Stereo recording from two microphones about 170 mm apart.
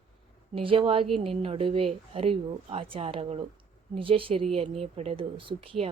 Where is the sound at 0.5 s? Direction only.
30° right (ahead or behind).